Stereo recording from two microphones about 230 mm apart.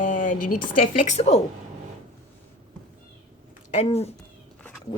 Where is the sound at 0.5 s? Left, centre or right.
Left.